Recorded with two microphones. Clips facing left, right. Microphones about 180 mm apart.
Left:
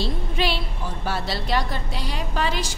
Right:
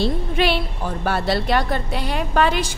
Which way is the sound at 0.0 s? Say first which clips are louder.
Right 5 dB; 60° right (ahead or behind).